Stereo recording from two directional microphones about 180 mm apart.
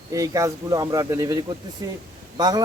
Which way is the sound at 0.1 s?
15° right (ahead or behind).